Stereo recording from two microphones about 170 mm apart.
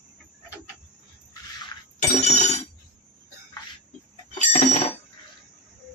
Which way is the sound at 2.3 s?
40° left (ahead or behind).